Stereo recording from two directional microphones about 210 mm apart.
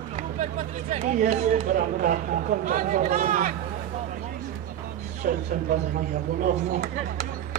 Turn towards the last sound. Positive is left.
turn(degrees=-35)  # may be behind; listen again after turning